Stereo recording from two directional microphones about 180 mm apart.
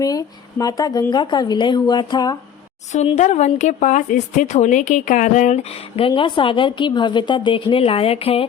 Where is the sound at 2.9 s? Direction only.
40° left (ahead or behind).